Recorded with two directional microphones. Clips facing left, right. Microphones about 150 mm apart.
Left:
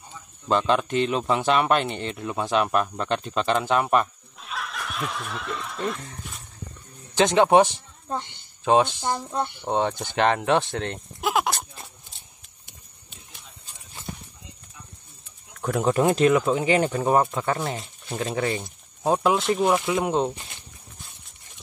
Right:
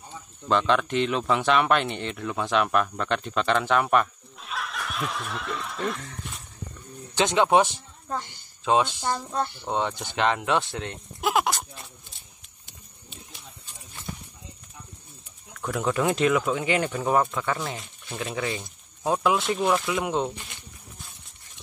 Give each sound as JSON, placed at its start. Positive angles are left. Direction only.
{"t": 0.5, "sound": "speech", "side_deg": 35}
{"t": 4.4, "sound": "speech", "side_deg": 0}
{"t": 7.4, "sound": "speech", "side_deg": 20}
{"t": 10.1, "sound": "speech", "side_deg": 45}
{"t": 11.1, "sound": "speech", "side_deg": 0}
{"t": 15.7, "sound": "speech", "side_deg": 35}
{"t": 18.6, "sound": "speech", "side_deg": 25}
{"t": 19.6, "sound": "speech", "side_deg": 15}
{"t": 19.9, "sound": "speech", "side_deg": 35}